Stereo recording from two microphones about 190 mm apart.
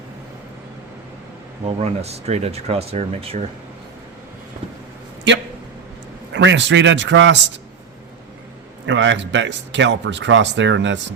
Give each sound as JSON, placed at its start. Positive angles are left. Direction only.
{"t": 1.6, "sound": "speech", "side_deg": -35}
{"t": 6.3, "sound": "speech", "side_deg": -70}
{"t": 8.9, "sound": "speech", "side_deg": -75}